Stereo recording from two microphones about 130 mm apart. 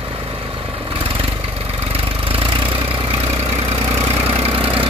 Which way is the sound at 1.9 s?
45° right (ahead or behind).